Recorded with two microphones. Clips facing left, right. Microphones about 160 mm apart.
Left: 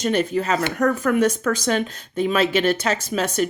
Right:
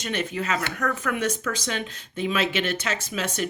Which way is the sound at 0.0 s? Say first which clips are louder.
Left 8 dB; 40° left (ahead or behind).